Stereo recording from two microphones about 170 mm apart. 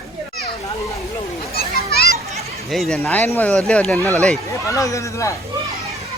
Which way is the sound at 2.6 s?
Centre (ahead or behind).